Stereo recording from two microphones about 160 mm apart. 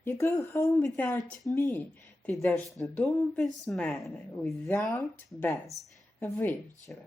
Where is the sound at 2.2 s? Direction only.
5° left (ahead or behind).